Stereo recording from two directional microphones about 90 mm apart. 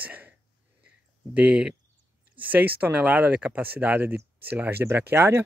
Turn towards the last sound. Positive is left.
turn(degrees=-25)  # may be behind; listen again after turning